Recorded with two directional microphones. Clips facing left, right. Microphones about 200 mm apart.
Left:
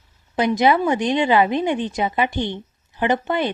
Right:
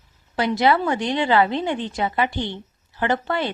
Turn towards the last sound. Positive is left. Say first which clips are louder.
# left 2 dB
turn(degrees=20)  # may be behind; listen again after turning